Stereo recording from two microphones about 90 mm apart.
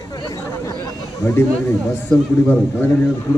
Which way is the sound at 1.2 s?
30° left (ahead or behind).